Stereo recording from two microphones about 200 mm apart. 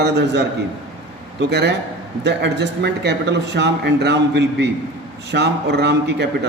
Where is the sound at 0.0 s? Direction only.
55° right (ahead or behind).